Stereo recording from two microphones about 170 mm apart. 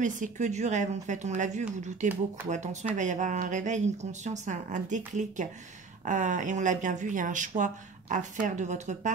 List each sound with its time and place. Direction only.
0.0 s speech: 45° right (ahead or behind)